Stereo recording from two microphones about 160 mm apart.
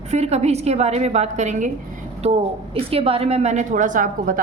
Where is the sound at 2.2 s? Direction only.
40° right (ahead or behind).